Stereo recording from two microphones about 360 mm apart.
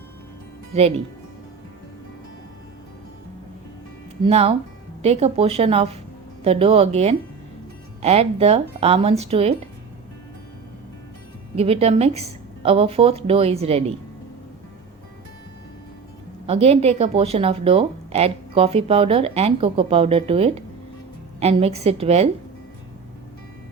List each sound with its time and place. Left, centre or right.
0.7 s a woman's voice: centre
4.2 s a woman's voice: centre
11.5 s a woman's voice: centre
16.5 s a woman's voice: centre